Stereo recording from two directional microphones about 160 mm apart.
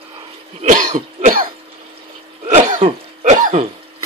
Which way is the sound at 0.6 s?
50° right (ahead or behind).